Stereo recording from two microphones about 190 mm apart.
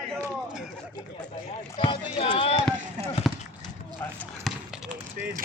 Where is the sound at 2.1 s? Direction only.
30° left (ahead or behind).